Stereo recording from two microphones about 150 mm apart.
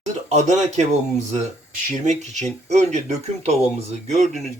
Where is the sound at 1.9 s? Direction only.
50° right (ahead or behind).